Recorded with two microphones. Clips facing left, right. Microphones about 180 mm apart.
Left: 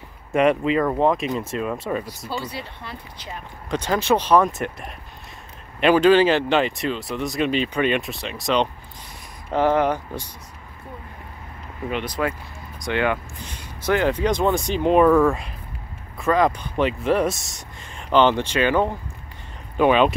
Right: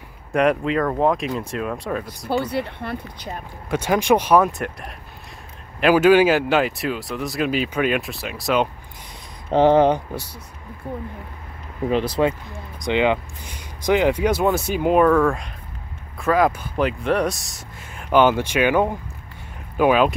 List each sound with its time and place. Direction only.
0.3 s speech: centre (ahead or behind)
2.2 s speech: 55° right (ahead or behind)
3.7 s speech: 10° right (ahead or behind)
4.5 s speech: centre (ahead or behind)
9.5 s speech: 30° right (ahead or behind)
11.9 s speech: 25° right (ahead or behind); by 15.0 s 5° right (ahead or behind)
15.0 s speech: 5° left (ahead or behind)